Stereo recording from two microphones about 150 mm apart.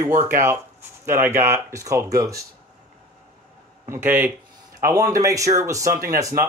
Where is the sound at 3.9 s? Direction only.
15° right (ahead or behind).